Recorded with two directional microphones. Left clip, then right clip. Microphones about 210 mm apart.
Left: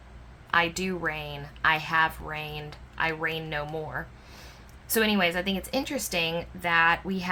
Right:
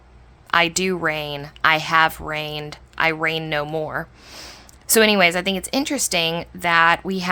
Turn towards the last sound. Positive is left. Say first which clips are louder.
# right 7 dB
turn(degrees=-45)  # may be behind; listen again after turning